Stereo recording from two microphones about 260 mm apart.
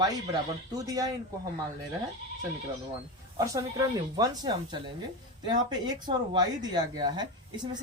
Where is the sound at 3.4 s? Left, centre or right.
Centre.